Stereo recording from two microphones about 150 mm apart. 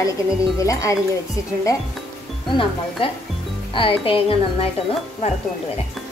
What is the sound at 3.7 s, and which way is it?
Speech, 35° left (ahead or behind).